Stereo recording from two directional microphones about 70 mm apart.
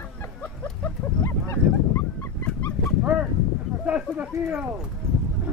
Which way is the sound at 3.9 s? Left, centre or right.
Centre.